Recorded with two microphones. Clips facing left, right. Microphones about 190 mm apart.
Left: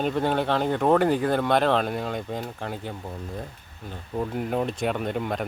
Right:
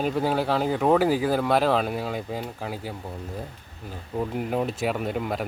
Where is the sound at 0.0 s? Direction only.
5° right (ahead or behind).